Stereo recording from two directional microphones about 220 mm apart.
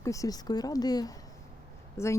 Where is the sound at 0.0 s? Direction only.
15° left (ahead or behind).